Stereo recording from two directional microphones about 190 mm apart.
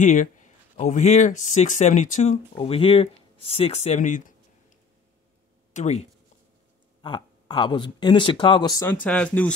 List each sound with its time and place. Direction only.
0.0 s speech: 40° left (ahead or behind)
5.7 s speech: 35° left (ahead or behind)
7.0 s speech: 25° left (ahead or behind)
9.0 s speech: 5° left (ahead or behind)